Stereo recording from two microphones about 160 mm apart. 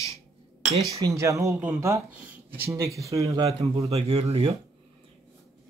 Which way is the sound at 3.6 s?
40° right (ahead or behind).